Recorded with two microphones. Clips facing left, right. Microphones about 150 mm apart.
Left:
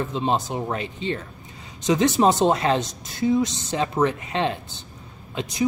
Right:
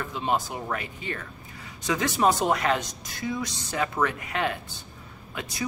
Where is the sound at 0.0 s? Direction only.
25° left (ahead or behind).